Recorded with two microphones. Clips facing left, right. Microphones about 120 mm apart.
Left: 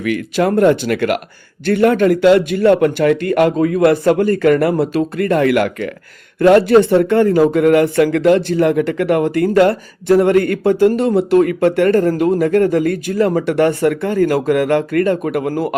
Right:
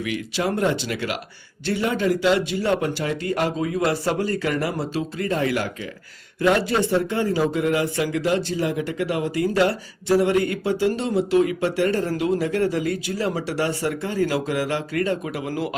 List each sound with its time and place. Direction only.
0.0 s speech: 55° left (ahead or behind)